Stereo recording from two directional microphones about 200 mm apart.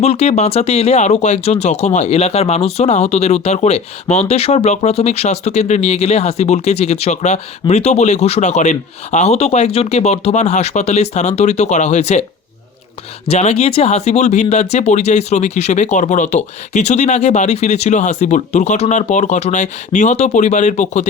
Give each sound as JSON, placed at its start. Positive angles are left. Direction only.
{"t": 0.0, "sound": "speech", "side_deg": 30}
{"t": 13.2, "sound": "speech", "side_deg": 30}